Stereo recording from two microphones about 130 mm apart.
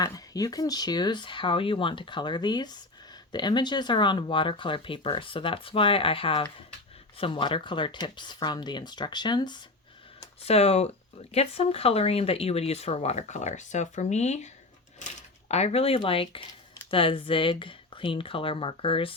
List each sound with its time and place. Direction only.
0.0 s speech: 30° left (ahead or behind)
10.4 s speech: 55° left (ahead or behind)